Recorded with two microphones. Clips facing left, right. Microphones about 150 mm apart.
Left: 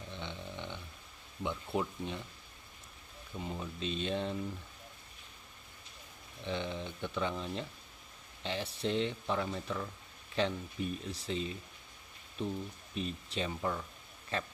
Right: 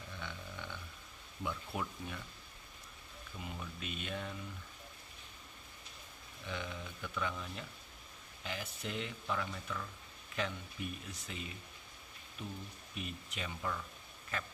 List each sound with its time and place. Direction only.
0.1 s a sound: 20° left (ahead or behind)
1.4 s speech: 25° left (ahead or behind)
3.3 s speech: 30° left (ahead or behind)
6.4 s speech: 30° left (ahead or behind)